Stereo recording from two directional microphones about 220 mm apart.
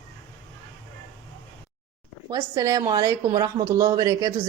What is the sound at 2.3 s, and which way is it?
A woman's voice, 15° right (ahead or behind).